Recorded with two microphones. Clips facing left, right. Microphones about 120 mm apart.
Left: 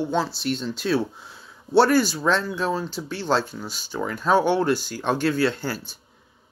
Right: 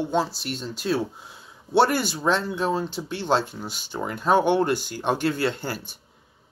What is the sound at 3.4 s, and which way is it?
Speech, 60° right (ahead or behind).